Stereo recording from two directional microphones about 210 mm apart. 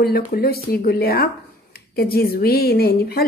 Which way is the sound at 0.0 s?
45° left (ahead or behind).